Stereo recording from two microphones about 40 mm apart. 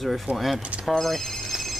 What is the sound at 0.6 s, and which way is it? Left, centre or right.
Speech, right.